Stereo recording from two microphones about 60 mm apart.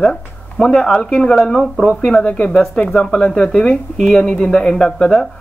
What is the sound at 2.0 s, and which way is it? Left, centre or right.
Speech, centre.